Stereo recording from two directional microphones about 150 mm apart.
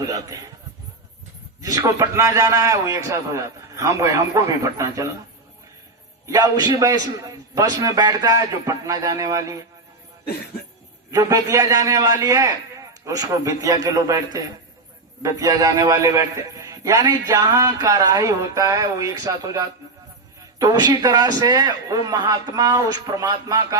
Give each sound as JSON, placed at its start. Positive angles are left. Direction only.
{"t": 0.0, "sound": "a man's voice", "side_deg": -25}
{"t": 1.6, "sound": "a man's voice", "side_deg": -20}
{"t": 6.2, "sound": "a man's voice", "side_deg": -25}
{"t": 11.1, "sound": "a man's voice", "side_deg": -20}